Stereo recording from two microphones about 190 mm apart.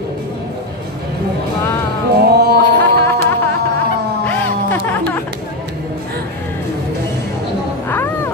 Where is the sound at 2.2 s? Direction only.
55° right (ahead or behind).